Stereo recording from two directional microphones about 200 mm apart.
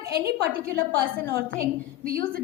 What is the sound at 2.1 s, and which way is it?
Speech, 50° right (ahead or behind).